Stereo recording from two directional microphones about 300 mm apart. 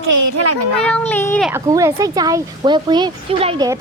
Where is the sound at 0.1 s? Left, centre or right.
Right.